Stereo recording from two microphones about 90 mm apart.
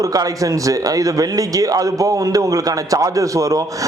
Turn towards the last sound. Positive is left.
turn(degrees=-35)  # may be behind; listen again after turning